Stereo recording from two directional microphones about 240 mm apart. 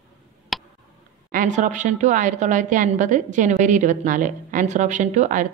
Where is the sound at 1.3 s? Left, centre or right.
Right.